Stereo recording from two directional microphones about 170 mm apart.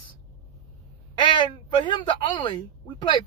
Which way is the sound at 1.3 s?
30° left (ahead or behind).